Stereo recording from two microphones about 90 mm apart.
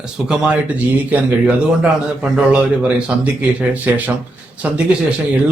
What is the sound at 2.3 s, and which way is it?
Speech, 10° right (ahead or behind).